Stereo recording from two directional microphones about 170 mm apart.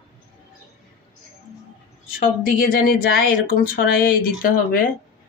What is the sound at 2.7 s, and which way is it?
Speech, 60° left (ahead or behind).